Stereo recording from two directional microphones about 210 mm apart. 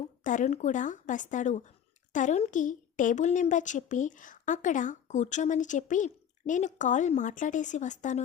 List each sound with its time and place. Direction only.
0.3 s a woman's voice: 35° left (ahead or behind)